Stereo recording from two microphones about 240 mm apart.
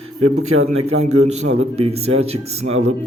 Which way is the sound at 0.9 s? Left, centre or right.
Right.